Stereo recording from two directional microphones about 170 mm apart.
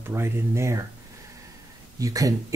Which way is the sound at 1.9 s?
20° right (ahead or behind).